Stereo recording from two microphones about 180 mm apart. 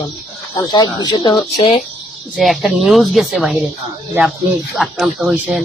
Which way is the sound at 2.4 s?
Centre (ahead or behind).